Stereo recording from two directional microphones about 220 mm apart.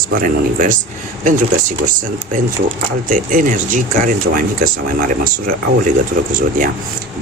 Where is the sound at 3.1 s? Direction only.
40° right (ahead or behind).